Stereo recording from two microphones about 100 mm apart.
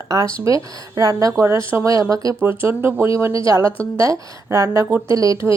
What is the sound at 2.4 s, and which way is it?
A woman's voice, 25° right (ahead or behind).